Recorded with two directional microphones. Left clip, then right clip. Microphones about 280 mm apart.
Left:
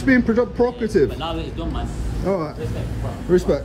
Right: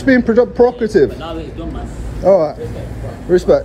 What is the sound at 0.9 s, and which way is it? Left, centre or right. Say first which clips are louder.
Speech: right 6 dB; left.